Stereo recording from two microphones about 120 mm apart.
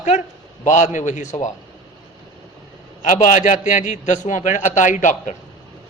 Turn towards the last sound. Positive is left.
turn(degrees=90)